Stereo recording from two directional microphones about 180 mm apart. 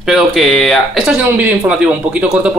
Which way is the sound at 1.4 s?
10° right (ahead or behind).